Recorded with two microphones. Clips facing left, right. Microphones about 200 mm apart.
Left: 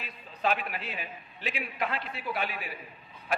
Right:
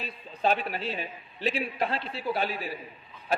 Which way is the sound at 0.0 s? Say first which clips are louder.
Right 3 dB; 30° right (ahead or behind).